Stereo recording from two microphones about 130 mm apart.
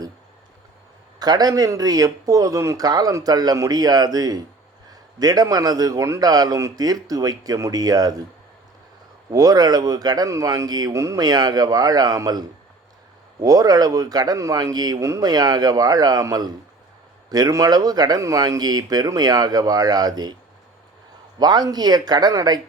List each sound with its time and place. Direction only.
1.2 s speech: 30° right (ahead or behind)
9.3 s speech: 30° right (ahead or behind)
21.3 s speech: 30° right (ahead or behind)